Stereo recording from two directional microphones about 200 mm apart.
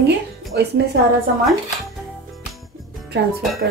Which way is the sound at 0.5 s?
55° right (ahead or behind).